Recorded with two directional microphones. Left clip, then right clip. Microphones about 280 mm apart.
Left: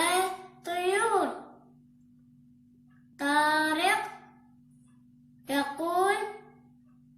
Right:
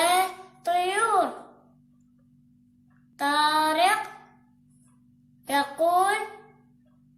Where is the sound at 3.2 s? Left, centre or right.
Centre.